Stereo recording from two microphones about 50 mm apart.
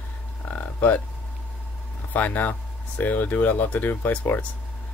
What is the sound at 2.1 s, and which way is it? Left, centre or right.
Speech, left.